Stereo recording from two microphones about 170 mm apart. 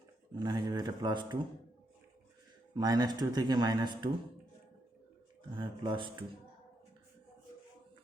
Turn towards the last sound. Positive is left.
turn(degrees=-30)  # may be behind; listen again after turning